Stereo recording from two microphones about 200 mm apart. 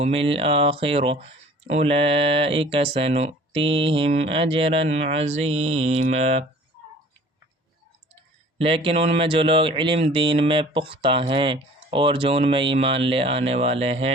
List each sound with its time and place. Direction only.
0.0 s speech: 30° right (ahead or behind)
8.1 s speech: 30° right (ahead or behind)